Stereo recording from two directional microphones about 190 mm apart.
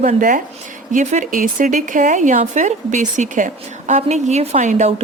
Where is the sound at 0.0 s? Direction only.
45° right (ahead or behind).